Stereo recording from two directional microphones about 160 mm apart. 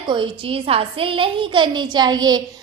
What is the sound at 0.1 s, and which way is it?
A woman's voice, 30° right (ahead or behind).